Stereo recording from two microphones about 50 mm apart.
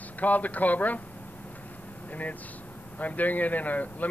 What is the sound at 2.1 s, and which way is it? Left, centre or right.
Speech, left.